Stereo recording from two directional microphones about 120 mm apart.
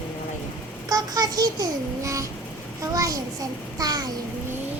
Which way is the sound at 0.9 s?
35° right (ahead or behind).